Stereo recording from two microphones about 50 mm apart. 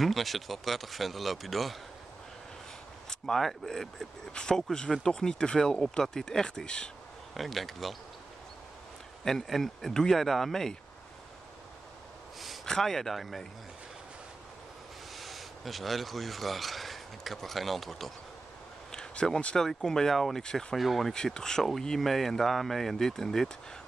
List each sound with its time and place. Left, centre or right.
0.0 s speech: centre
3.1 s speech: centre
7.3 s speech: centre
9.2 s speech: centre
12.6 s speech: centre
15.1 s speech: centre
18.9 s a sound: centre
19.5 s speech: centre
21.1 s speech: centre